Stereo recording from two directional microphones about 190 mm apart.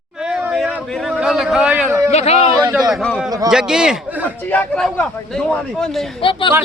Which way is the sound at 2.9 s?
Centre (ahead or behind).